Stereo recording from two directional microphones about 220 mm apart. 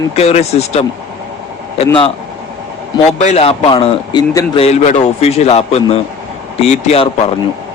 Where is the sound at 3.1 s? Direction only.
30° left (ahead or behind).